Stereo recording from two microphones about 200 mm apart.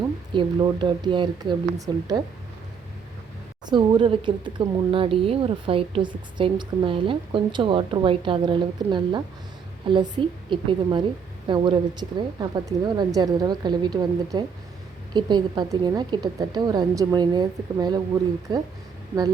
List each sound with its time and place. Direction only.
0.3 s speech: 25° right (ahead or behind)
3.7 s speech: 25° right (ahead or behind)